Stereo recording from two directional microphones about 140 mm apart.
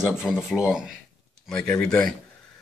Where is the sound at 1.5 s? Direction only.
5° left (ahead or behind).